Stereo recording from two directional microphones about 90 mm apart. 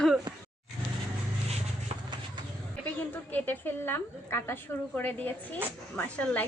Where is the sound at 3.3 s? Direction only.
20° left (ahead or behind).